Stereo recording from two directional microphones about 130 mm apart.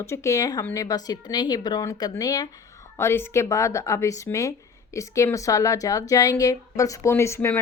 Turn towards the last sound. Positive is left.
turn(degrees=20)  # may be behind; listen again after turning